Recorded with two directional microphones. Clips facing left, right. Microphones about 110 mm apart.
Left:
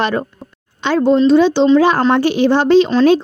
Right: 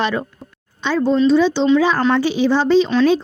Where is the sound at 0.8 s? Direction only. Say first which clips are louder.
Left 4 dB; 75° left (ahead or behind).